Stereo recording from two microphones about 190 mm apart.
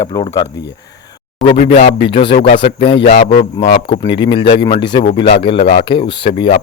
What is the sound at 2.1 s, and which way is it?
Speech, 25° left (ahead or behind).